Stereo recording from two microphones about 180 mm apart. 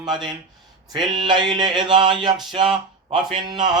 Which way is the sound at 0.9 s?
25° right (ahead or behind).